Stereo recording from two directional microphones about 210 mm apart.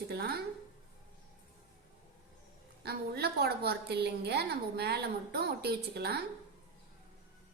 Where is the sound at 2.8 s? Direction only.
50° right (ahead or behind).